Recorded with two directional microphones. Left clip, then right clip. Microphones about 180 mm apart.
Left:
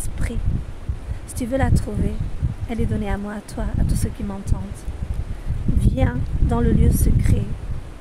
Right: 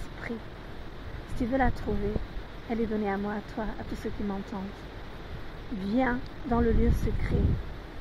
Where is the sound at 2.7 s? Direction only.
40° left (ahead or behind).